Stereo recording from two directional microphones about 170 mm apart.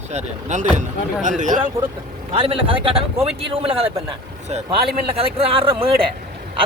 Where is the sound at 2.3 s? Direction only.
35° right (ahead or behind).